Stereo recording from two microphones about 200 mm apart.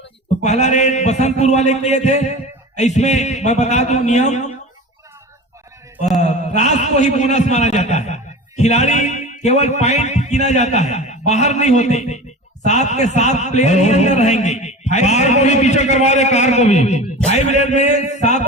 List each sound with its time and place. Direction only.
0.4 s a man's voice: 35° left (ahead or behind)
6.1 s a man's voice: 35° left (ahead or behind)